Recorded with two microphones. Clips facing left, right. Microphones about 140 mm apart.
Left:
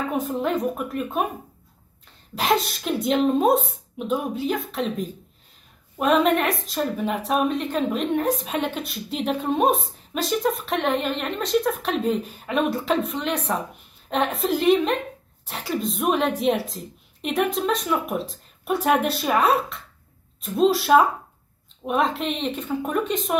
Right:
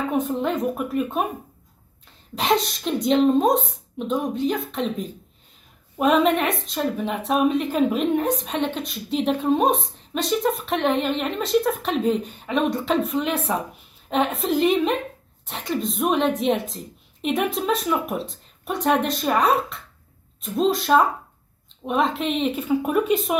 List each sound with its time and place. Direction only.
0.1 s a woman's voice: centre (ahead or behind)
2.3 s a woman's voice: centre (ahead or behind)